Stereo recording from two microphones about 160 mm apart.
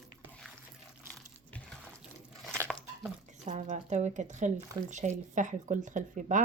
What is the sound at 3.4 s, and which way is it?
Speech, 50° right (ahead or behind).